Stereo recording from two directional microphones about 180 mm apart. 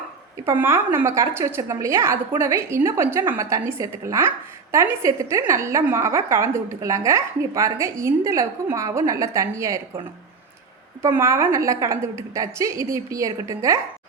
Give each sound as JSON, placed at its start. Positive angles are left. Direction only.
{"t": 0.4, "sound": "a woman's voice", "side_deg": -10}
{"t": 11.0, "sound": "a woman's voice", "side_deg": -15}